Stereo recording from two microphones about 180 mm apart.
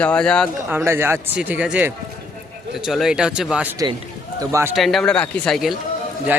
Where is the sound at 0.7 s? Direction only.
15° right (ahead or behind).